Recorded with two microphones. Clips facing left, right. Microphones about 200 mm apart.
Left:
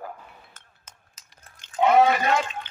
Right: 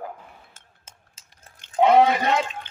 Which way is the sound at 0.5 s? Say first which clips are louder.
Right 1 dB; 25° right (ahead or behind).